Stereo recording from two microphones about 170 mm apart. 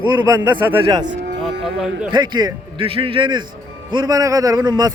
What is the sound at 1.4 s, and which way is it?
Speech, centre (ahead or behind).